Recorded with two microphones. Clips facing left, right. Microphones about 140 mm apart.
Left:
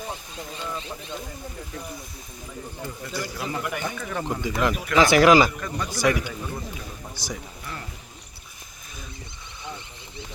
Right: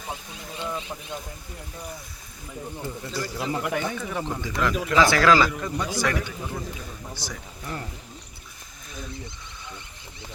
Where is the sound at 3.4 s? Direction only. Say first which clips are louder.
Right 4 dB; 25° right (ahead or behind).